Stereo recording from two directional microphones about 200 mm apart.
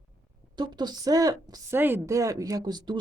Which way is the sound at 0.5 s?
20° right (ahead or behind).